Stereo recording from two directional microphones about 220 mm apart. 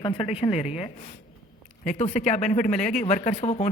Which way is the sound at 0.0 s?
25° left (ahead or behind).